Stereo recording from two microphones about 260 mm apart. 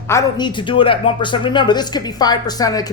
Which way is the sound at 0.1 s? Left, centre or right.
Centre.